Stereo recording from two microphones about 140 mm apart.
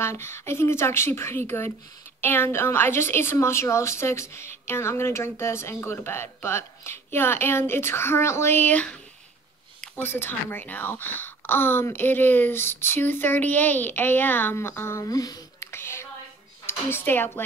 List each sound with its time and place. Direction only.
0.0 s a woman's voice: 20° left (ahead or behind)